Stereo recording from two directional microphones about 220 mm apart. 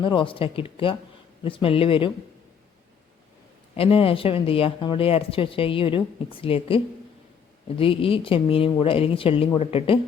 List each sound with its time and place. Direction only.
0.0 s speech: 20° left (ahead or behind)
3.8 s speech: 25° left (ahead or behind)